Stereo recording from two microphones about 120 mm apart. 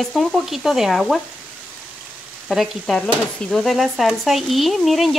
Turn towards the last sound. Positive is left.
turn(degrees=0)  # may be behind; listen again after turning